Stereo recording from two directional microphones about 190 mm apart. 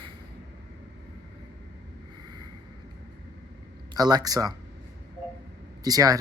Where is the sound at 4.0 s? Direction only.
20° right (ahead or behind).